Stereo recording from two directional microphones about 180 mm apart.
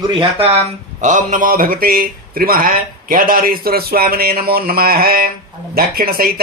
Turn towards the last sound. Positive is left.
turn(degrees=-55)  # may be behind; listen again after turning